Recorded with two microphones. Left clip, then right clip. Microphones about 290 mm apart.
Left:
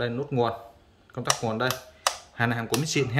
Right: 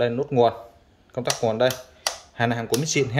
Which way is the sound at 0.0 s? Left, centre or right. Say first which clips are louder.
Right 7 dB; centre.